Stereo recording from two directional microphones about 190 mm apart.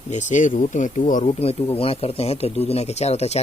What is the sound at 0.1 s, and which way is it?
Speech, 40° left (ahead or behind).